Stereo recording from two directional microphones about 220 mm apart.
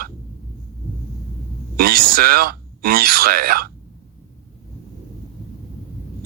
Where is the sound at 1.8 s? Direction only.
45° right (ahead or behind).